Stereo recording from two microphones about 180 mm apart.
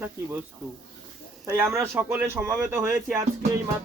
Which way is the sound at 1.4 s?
15° right (ahead or behind).